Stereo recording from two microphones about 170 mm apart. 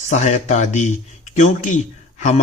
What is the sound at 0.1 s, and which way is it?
Speech, 45° left (ahead or behind).